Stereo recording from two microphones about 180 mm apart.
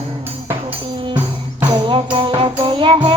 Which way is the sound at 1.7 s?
25° right (ahead or behind).